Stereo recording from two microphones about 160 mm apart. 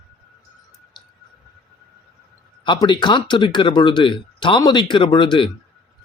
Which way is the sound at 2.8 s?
30° left (ahead or behind).